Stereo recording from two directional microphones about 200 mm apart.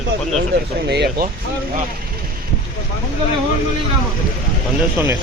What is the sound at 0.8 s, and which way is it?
Speech, 55° right (ahead or behind).